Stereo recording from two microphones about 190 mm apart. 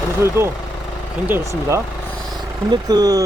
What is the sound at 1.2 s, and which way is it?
Speech, 15° right (ahead or behind).